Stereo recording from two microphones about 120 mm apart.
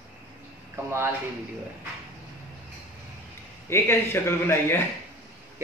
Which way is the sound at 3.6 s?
20° left (ahead or behind).